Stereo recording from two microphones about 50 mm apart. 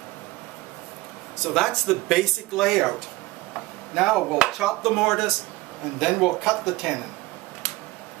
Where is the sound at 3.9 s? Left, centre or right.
Centre.